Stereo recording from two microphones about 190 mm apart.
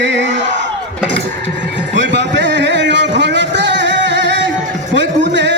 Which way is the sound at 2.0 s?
70° right (ahead or behind).